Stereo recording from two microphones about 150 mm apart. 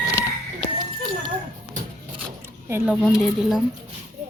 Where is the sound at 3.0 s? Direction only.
Centre (ahead or behind).